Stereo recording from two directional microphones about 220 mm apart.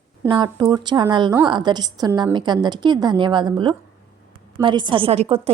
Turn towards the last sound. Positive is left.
turn(degrees=-25)  # may be behind; listen again after turning